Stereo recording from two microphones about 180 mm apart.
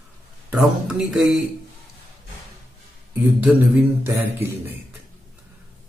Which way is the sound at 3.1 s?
10° right (ahead or behind).